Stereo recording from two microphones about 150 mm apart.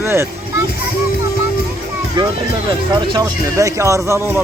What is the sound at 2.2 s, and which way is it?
Speech, 30° right (ahead or behind).